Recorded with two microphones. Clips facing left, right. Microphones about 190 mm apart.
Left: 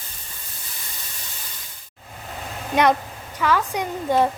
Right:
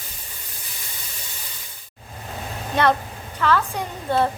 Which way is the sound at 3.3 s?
10° left (ahead or behind).